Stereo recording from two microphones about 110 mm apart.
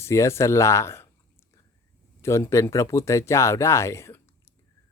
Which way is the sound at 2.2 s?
25° left (ahead or behind).